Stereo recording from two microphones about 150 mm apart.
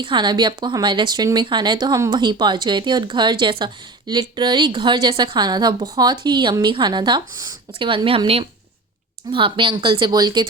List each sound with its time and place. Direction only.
0.0 s speech: 30° right (ahead or behind)